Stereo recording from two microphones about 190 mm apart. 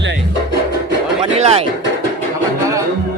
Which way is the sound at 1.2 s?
30° right (ahead or behind).